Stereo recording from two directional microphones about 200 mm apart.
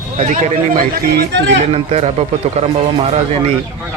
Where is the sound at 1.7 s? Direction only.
30° right (ahead or behind).